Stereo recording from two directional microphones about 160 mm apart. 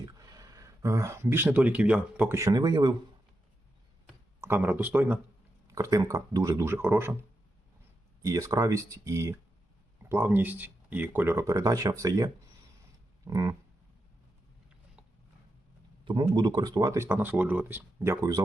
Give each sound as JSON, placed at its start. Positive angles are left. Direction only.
{"t": 0.2, "sound": "speech", "side_deg": -25}
{"t": 2.4, "sound": "speech", "side_deg": -25}
{"t": 4.4, "sound": "speech", "side_deg": -15}
{"t": 8.2, "sound": "speech", "side_deg": -20}
{"t": 16.0, "sound": "speech", "side_deg": -25}